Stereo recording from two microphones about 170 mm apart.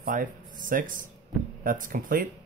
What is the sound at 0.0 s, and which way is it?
Speech, 50° right (ahead or behind).